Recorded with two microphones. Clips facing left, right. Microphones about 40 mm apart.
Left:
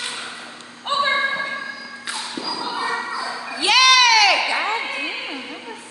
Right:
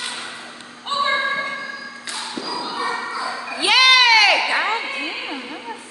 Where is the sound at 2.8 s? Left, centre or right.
Centre.